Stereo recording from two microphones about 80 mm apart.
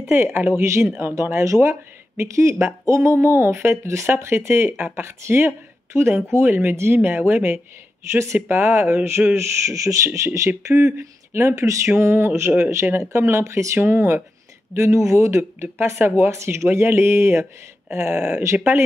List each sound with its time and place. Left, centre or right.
0.0 s speech: right
8.1 s speech: right
18.1 s speech: centre